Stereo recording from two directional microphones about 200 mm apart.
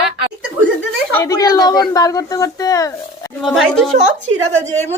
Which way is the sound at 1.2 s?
20° left (ahead or behind).